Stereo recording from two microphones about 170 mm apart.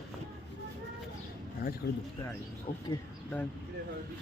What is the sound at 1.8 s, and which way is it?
Speech, 90° left.